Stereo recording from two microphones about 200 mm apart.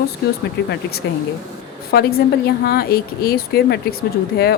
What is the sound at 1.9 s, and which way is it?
A woman's voice, 50° left (ahead or behind).